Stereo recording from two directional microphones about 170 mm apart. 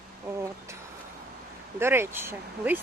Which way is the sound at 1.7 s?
15° right (ahead or behind).